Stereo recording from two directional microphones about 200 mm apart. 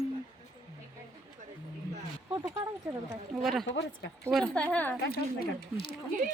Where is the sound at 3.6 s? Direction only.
65° left (ahead or behind).